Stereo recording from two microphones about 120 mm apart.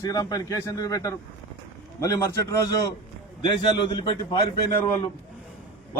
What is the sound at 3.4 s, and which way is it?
Speech, 40° left (ahead or behind).